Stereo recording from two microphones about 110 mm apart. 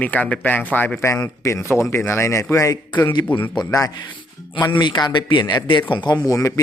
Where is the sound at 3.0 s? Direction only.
45° left (ahead or behind).